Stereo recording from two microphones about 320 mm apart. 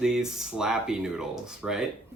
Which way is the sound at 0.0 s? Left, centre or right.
Centre.